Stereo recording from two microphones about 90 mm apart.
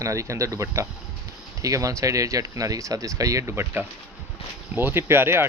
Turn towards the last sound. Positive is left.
turn(degrees=-25)  # may be behind; listen again after turning